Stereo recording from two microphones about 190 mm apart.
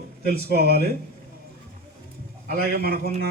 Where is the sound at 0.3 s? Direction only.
55° right (ahead or behind).